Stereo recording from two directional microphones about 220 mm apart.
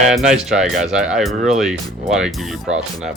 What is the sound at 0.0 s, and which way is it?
Speech, centre (ahead or behind).